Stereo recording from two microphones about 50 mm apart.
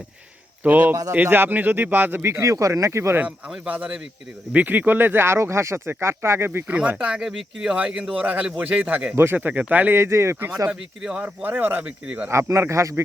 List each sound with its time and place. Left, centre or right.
0.6 s a man's voice: right
2.2 s speech: right
3.2 s a man's voice: right
6.7 s a man's voice: right
6.9 s speech: centre
8.1 s a man's voice: right
9.1 s speech: right
9.5 s a man's voice: right
9.9 s speech: right
10.7 s speech: centre
11.4 s speech: right
11.8 s speech: right
12.3 s a man's voice: right